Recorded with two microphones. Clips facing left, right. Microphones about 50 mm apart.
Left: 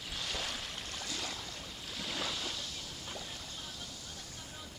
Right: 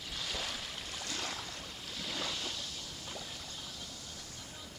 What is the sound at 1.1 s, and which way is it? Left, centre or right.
Boat, right.